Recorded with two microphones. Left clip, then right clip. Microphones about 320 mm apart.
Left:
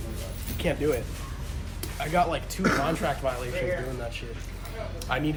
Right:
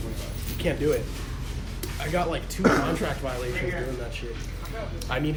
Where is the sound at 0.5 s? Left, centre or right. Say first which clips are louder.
Right 1 dB; left.